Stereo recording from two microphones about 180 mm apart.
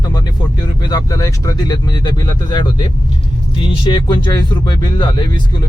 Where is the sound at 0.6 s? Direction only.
20° left (ahead or behind).